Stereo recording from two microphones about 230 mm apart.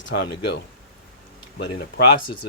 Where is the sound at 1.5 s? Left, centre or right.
Left.